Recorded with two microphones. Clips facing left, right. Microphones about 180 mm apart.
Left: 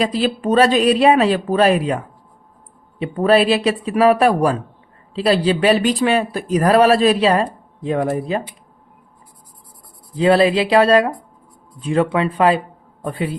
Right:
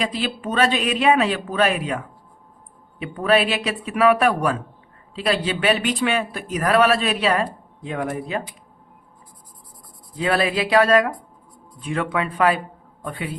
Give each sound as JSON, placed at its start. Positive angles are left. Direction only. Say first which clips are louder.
{"t": 0.0, "sound": "speech", "louder": "left 7 dB", "side_deg": 40}
{"t": 10.2, "sound": "speech", "louder": "left 7 dB", "side_deg": 30}